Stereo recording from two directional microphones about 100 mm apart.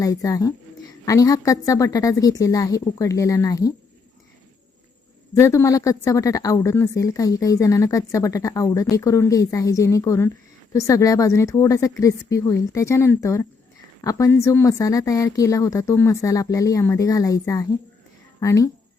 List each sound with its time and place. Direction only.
0.0 s a woman's voice: 35° left (ahead or behind)
5.3 s a woman's voice: 30° left (ahead or behind)